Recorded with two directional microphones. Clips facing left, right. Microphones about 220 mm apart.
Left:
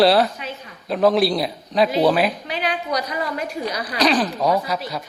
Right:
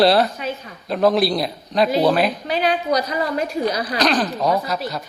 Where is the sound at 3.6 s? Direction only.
5° left (ahead or behind).